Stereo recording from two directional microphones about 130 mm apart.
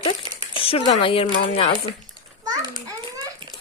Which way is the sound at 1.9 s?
35° right (ahead or behind).